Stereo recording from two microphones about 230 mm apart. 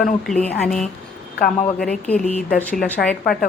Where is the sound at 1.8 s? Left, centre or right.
Centre.